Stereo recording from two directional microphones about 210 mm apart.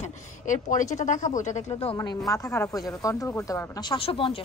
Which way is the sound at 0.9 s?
35° left (ahead or behind).